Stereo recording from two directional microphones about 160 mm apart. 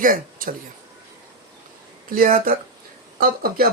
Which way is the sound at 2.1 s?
60° right (ahead or behind).